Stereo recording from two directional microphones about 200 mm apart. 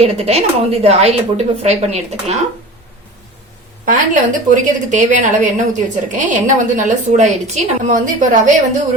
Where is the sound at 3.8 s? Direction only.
40° right (ahead or behind).